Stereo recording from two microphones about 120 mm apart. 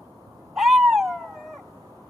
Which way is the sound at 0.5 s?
Centre (ahead or behind).